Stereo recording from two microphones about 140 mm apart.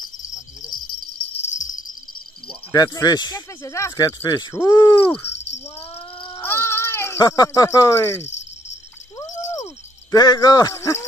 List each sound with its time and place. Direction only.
1.1 s jingle bell: 50° left (ahead or behind)
2.7 s speech: 30° left (ahead or behind)
6.4 s cat: 15° left (ahead or behind)
9.2 s a sound: 20° left (ahead or behind)
10.1 s speech: 30° left (ahead or behind)